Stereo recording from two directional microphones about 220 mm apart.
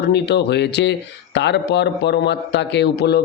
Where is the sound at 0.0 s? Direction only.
50° left (ahead or behind).